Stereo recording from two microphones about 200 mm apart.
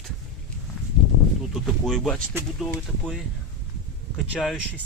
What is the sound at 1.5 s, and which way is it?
Speech, centre (ahead or behind).